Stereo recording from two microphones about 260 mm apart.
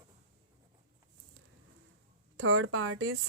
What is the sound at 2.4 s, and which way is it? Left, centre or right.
Speech, right.